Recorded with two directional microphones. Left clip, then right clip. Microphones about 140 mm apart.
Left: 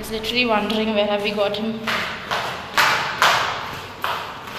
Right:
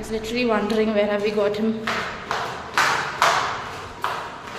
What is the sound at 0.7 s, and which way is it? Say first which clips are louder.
Speech: even; 45° right (ahead or behind).